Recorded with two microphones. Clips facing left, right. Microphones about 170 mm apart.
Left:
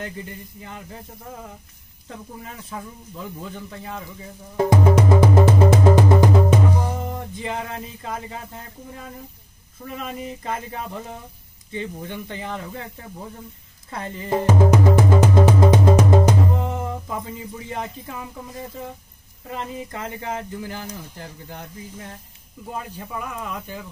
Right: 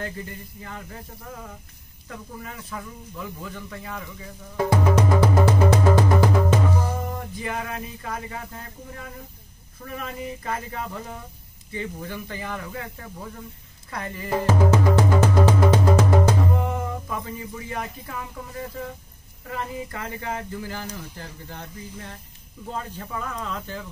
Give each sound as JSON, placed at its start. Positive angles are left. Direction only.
{"t": 2.0, "sound": "speech", "side_deg": 25}
{"t": 4.6, "sound": "music", "side_deg": 25}
{"t": 9.9, "sound": "speech", "side_deg": 20}
{"t": 13.8, "sound": "music", "side_deg": 25}
{"t": 19.5, "sound": "speech", "side_deg": 20}
{"t": 22.7, "sound": "speech", "side_deg": 10}